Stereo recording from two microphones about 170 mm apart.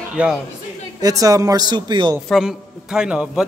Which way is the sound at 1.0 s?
20° right (ahead or behind).